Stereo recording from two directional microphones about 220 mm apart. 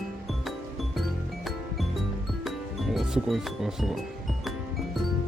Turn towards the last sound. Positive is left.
turn(degrees=0)  # may be behind; listen again after turning